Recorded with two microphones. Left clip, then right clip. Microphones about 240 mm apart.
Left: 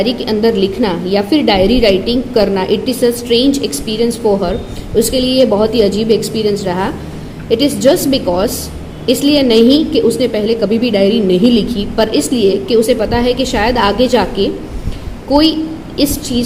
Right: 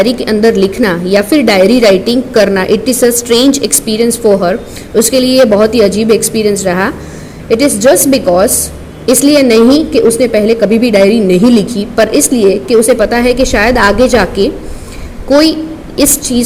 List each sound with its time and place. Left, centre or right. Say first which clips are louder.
0.0 s a woman's voice: right 5 dB; right